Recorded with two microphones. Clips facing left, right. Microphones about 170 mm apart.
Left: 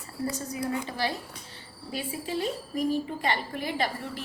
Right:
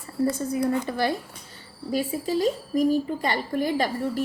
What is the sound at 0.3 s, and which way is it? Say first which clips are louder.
Speech: right 6 dB; 50° right (ahead or behind).